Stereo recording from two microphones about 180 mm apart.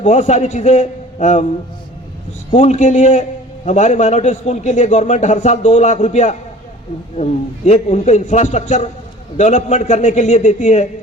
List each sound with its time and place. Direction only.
0.0 s a man's voice: 40° left (ahead or behind)
2.5 s a man's voice: 40° left (ahead or behind)